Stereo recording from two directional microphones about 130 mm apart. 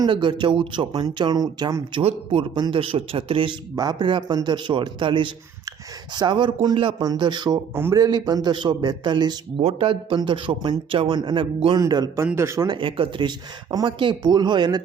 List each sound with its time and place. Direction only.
0.0 s a man's voice: 35° right (ahead or behind)
2.0 s a man's voice: 50° right (ahead or behind)
3.8 s a man's voice: 30° right (ahead or behind)
9.6 s a man's voice: 45° right (ahead or behind); by 12.6 s 20° right (ahead or behind)
12.6 s a man's voice: 40° right (ahead or behind)